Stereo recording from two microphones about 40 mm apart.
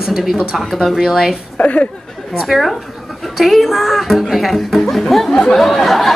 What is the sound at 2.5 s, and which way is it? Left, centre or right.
A woman's voice, centre.